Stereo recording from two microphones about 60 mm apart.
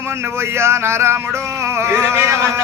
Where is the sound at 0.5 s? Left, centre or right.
Right.